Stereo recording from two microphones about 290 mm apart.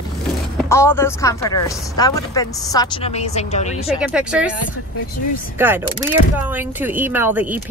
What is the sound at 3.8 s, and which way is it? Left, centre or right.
Speech, centre.